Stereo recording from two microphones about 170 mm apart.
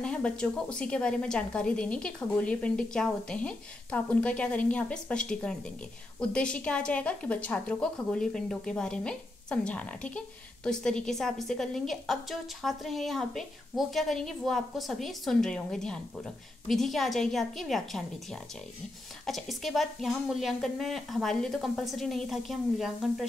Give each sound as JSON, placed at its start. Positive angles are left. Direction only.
{"t": 0.0, "sound": "speech", "side_deg": 5}